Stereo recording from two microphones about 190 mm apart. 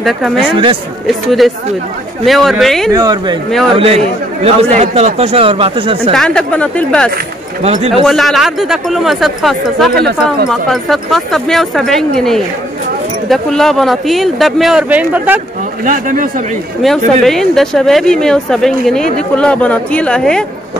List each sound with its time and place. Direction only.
0.0 s speech: centre (ahead or behind)
2.9 s speech: 20° right (ahead or behind)
3.7 s speech: 30° right (ahead or behind)
6.1 s speech: 5° left (ahead or behind)
7.6 s speech: 30° right (ahead or behind)
8.0 s speech: centre (ahead or behind)
15.8 s speech: 45° right (ahead or behind)
16.8 s speech: centre (ahead or behind)